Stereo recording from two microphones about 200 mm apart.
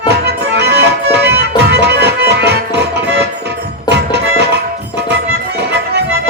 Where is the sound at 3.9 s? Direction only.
55° right (ahead or behind).